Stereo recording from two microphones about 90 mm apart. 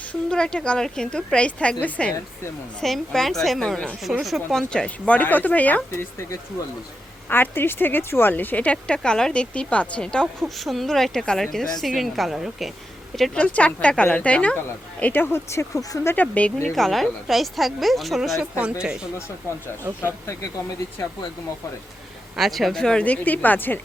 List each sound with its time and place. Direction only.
0.1 s a woman's voice: 10° left (ahead or behind)
4.7 s speech: 10° left (ahead or behind)
7.3 s a woman's voice: 25° left (ahead or behind); by 13.4 s 5° left (ahead or behind)
13.4 s speech: 15° left (ahead or behind); by 16.0 s 40° left (ahead or behind)
16.0 s speech: 20° left (ahead or behind)
16.6 s a woman's voice: centre (ahead or behind)
22.4 s speech: centre (ahead or behind); by 23.8 s 20° left (ahead or behind)